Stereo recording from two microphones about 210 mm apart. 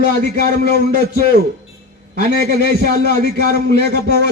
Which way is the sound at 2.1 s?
50° left (ahead or behind).